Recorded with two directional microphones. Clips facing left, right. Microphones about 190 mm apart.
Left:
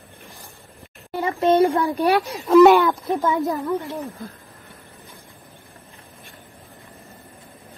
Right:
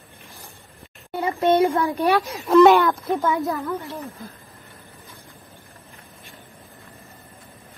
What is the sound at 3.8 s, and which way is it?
Speech, 15° left (ahead or behind).